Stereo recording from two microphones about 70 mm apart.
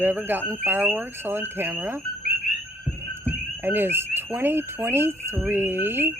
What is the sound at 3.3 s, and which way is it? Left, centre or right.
Frog, right.